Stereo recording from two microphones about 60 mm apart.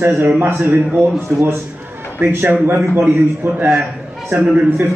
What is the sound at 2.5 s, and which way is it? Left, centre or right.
Speech, right.